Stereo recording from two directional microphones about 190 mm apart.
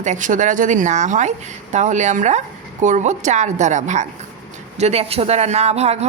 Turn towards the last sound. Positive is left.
turn(degrees=-35)  # may be behind; listen again after turning